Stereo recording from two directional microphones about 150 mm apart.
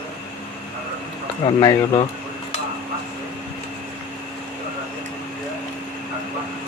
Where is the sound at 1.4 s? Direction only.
30° left (ahead or behind).